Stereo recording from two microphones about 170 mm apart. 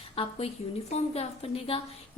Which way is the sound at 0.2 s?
35° left (ahead or behind).